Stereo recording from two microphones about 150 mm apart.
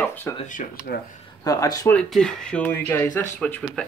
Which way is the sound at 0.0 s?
10° left (ahead or behind).